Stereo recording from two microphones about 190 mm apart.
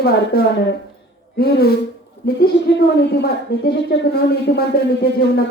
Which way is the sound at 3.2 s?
60° left (ahead or behind).